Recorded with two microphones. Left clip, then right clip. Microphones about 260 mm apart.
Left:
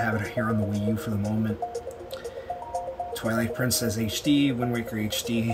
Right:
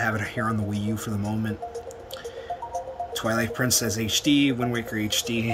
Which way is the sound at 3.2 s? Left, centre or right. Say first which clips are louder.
Right 3 dB; centre.